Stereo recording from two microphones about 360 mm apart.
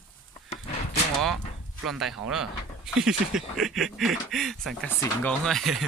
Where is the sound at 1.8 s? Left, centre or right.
Centre.